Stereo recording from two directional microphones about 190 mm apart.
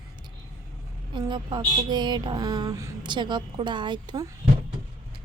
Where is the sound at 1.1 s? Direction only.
25° right (ahead or behind).